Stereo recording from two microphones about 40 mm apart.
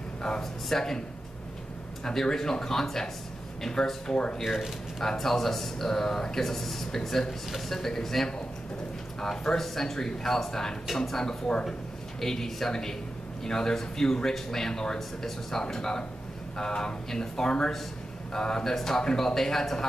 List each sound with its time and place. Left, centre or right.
0.2 s a sound: centre
2.0 s speech: centre
4.1 s speech: left
4.4 s speech: centre